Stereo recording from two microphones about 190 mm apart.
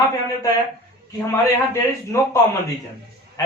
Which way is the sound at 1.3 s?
15° left (ahead or behind).